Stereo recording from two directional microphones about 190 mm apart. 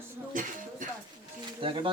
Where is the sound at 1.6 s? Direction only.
25° right (ahead or behind).